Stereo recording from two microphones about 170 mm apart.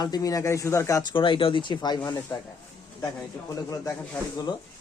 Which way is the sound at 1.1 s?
30° left (ahead or behind).